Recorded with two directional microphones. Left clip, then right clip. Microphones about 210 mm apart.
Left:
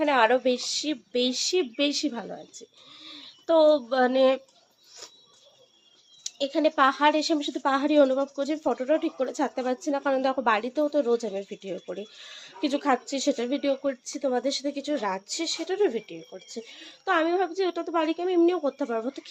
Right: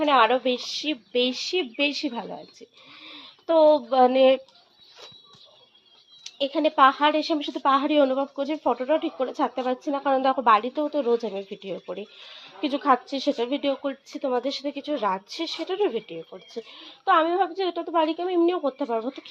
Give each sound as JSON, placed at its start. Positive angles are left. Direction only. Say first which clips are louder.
{"t": 0.0, "sound": "a woman's voice", "louder": "right 2 dB", "side_deg": 20}
{"t": 6.2, "sound": "a woman's voice", "louder": "right 1 dB", "side_deg": 20}